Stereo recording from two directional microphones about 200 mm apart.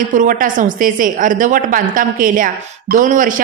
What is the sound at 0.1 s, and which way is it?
A woman's voice, 40° right (ahead or behind).